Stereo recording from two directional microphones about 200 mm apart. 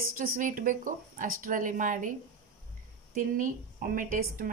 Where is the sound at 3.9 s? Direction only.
45° right (ahead or behind).